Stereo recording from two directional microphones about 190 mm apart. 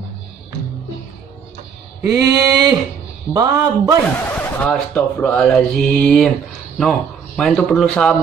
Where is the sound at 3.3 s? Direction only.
15° right (ahead or behind).